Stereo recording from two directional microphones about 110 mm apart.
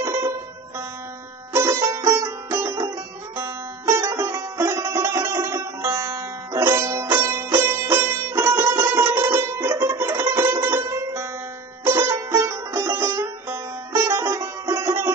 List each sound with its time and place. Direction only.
0.0 s music: 25° right (ahead or behind)
1.5 s music: 25° right (ahead or behind)